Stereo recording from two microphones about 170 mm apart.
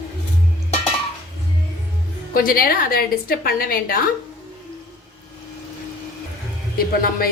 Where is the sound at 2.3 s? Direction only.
60° left (ahead or behind).